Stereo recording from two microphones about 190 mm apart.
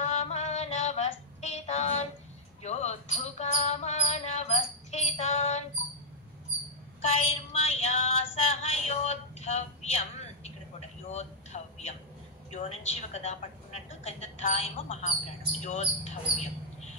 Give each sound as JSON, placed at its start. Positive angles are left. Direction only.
{"t": 0.1, "sound": "female singing", "side_deg": 35}
{"t": 2.6, "sound": "music", "side_deg": 35}
{"t": 7.0, "sound": "a sound", "side_deg": 35}
{"t": 12.4, "sound": "a woman's voice", "side_deg": 35}